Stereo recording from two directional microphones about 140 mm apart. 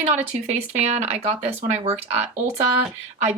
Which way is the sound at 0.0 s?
50° right (ahead or behind).